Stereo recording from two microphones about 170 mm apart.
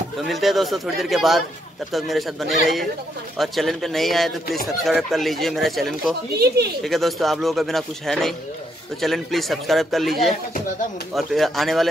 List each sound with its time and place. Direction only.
0.3 s speech: centre (ahead or behind)
6.4 s speech: 70° right (ahead or behind)
6.8 s speech: centre (ahead or behind)